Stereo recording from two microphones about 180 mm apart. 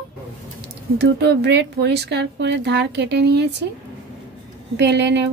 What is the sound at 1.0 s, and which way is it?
Speech, 70° right (ahead or behind).